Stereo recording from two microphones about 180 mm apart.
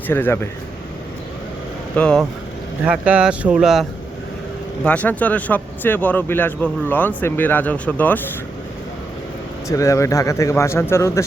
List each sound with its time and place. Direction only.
0.1 s speech: 10° left (ahead or behind)
2.0 s speech: 5° left (ahead or behind)
2.8 s speech: 5° right (ahead or behind)
4.8 s speech: 10° left (ahead or behind)
9.6 s speech: 15° left (ahead or behind)